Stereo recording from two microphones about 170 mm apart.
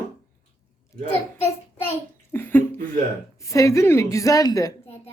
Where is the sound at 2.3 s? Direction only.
10° left (ahead or behind).